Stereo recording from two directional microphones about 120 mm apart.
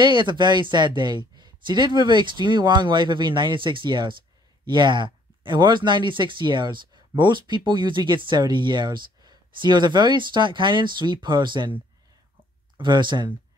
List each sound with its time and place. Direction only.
0.0 s speech: 40° right (ahead or behind)
12.7 s speech: 40° right (ahead or behind)